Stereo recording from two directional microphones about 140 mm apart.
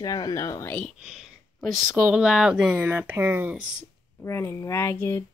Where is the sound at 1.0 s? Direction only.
Centre (ahead or behind).